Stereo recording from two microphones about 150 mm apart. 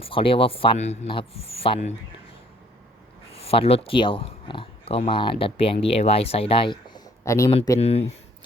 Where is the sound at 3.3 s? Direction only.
40° left (ahead or behind).